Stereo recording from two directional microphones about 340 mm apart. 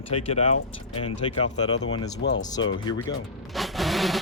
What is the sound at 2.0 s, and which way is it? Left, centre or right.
Speech, left.